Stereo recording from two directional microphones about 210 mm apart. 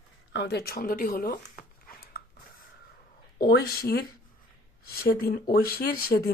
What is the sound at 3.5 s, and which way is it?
Speech, 50° left (ahead or behind).